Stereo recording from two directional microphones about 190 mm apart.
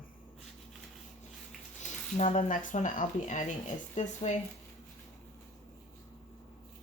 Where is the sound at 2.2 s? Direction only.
40° left (ahead or behind).